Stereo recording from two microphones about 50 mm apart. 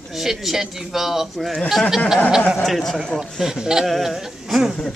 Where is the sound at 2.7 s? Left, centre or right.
Centre.